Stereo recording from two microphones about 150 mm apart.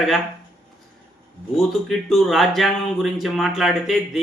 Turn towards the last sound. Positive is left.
turn(degrees=0)  # may be behind; listen again after turning